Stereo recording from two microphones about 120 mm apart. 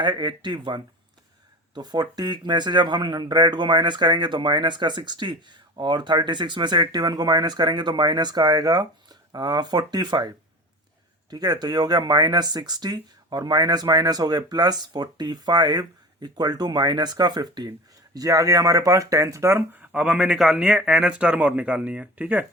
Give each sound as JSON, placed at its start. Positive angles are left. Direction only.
{"t": 0.0, "sound": "speech", "side_deg": -40}